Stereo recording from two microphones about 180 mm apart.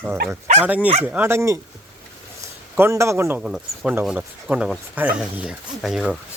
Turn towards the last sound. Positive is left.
turn(degrees=0)  # may be behind; listen again after turning